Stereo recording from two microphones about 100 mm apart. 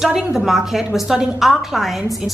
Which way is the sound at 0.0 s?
5° right (ahead or behind).